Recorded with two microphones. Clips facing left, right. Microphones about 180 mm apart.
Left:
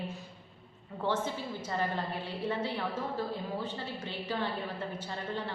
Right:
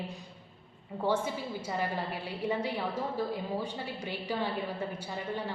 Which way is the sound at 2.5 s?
15° right (ahead or behind).